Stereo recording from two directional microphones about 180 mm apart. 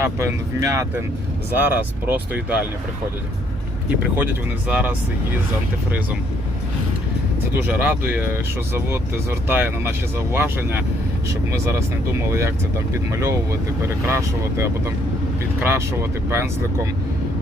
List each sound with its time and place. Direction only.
0.0 s speech: 15° right (ahead or behind)
4.7 s speech: 10° right (ahead or behind)
7.7 s speech: 10° right (ahead or behind)